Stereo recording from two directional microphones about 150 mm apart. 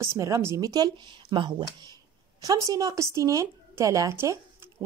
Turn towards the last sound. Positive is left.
turn(degrees=-20)  # may be behind; listen again after turning